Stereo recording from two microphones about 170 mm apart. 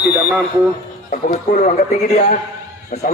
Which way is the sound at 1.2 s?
50° left (ahead or behind).